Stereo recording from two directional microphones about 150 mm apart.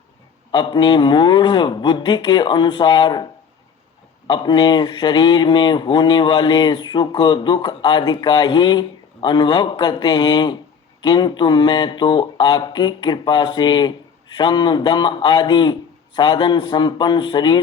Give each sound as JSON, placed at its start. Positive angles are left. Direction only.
{"t": 0.5, "sound": "speech", "side_deg": 30}
{"t": 4.3, "sound": "speech", "side_deg": 30}